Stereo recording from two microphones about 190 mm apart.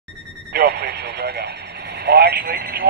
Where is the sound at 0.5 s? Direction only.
55° right (ahead or behind).